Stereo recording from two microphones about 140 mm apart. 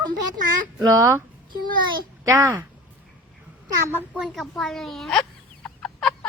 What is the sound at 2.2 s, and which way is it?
Speech, 20° right (ahead or behind).